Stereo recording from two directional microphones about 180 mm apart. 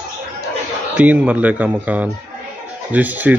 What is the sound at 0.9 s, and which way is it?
Speech, 5° right (ahead or behind).